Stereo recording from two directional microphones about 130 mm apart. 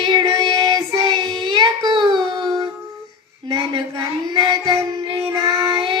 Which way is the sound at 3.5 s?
35° right (ahead or behind).